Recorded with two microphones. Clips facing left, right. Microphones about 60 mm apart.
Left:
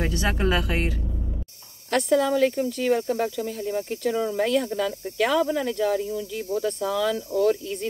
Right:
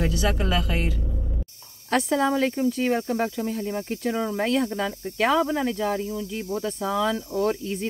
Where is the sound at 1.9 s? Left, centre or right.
Right.